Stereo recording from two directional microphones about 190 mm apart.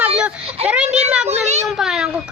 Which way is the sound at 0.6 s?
30° right (ahead or behind).